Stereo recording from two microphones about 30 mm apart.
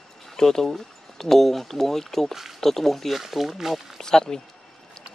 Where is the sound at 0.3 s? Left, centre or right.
Centre.